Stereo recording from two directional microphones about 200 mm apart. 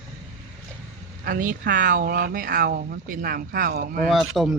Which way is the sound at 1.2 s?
45° right (ahead or behind).